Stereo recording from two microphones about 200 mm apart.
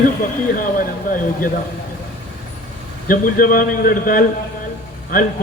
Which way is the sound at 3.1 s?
45° left (ahead or behind).